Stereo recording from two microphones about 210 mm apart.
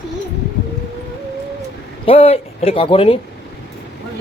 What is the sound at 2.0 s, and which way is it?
Speech, 30° left (ahead or behind).